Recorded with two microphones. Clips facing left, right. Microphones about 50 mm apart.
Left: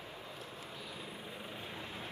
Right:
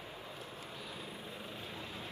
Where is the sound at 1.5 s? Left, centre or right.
Left.